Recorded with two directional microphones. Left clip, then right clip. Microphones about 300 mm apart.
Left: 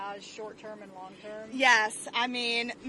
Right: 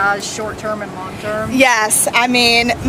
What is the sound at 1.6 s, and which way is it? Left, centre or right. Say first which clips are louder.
A woman's voice: right 10 dB; left.